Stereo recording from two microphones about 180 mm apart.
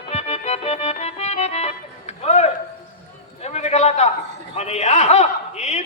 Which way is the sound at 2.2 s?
35° left (ahead or behind).